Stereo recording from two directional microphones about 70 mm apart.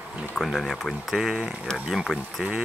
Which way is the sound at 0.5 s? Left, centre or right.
Centre.